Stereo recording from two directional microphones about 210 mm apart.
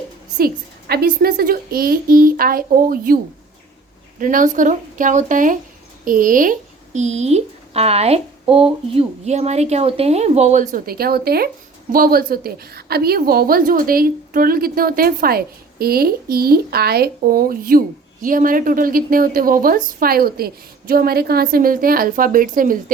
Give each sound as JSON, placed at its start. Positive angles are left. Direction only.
{"t": 0.3, "sound": "a woman's voice", "side_deg": -45}
{"t": 4.2, "sound": "a woman's voice", "side_deg": -40}